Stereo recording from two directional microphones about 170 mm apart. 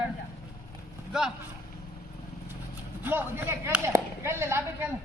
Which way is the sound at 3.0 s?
10° right (ahead or behind).